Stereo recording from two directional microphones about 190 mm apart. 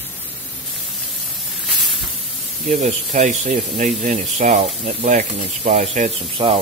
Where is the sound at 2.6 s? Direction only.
40° right (ahead or behind).